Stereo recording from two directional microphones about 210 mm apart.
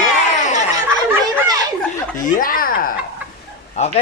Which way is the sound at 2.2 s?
40° left (ahead or behind).